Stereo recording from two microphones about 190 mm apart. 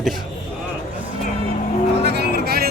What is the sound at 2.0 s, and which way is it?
Music, 60° right (ahead or behind).